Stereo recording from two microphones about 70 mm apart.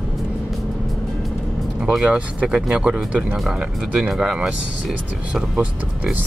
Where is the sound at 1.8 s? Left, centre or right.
Centre.